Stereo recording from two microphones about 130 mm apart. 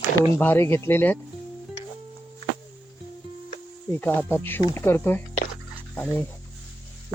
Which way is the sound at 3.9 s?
15° left (ahead or behind).